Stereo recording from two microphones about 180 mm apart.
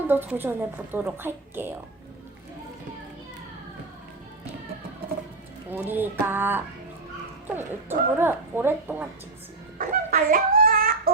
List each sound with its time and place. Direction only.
0.1 s speech: 10° right (ahead or behind)
5.7 s speech: 10° right (ahead or behind)
9.7 s a sound: 50° right (ahead or behind)